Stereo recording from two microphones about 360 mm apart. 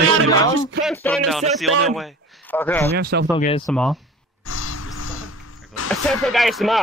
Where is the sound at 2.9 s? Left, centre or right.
Right.